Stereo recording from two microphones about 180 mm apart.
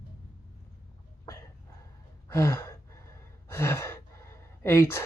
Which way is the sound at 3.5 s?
15° left (ahead or behind).